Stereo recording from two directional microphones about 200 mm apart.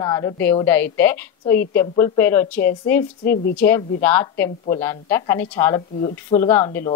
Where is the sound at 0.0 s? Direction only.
20° left (ahead or behind).